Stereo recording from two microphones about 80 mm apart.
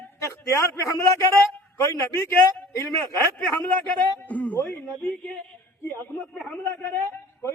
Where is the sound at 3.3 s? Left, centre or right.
Left.